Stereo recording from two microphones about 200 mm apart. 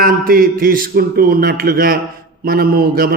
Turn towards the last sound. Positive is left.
turn(degrees=-50)  # may be behind; listen again after turning